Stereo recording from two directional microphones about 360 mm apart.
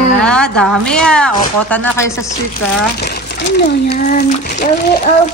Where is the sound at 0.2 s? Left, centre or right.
Centre.